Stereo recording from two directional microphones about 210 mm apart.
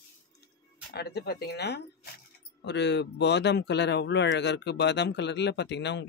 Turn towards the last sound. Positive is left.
turn(degrees=55)  # may be behind; listen again after turning